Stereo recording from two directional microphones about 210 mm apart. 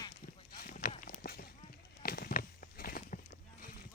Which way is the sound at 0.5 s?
40° left (ahead or behind).